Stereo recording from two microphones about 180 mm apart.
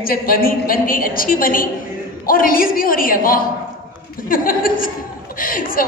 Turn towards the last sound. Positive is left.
turn(degrees=50)  # may be behind; listen again after turning